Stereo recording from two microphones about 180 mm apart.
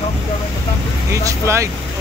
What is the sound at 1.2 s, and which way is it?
Speech, 15° right (ahead or behind).